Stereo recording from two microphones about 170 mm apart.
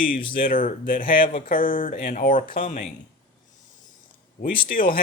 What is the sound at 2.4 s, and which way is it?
Speech, 30° left (ahead or behind).